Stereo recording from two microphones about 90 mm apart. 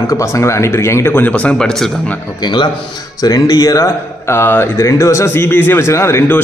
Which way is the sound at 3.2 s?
45° left (ahead or behind).